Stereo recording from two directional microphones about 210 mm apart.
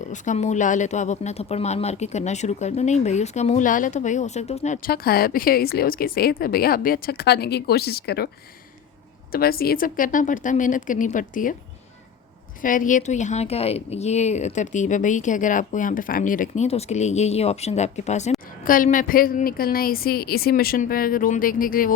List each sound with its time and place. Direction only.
0.1 s a woman's voice: 35° left (ahead or behind)
9.3 s a woman's voice: 45° left (ahead or behind)
12.6 s a woman's voice: 40° left (ahead or behind)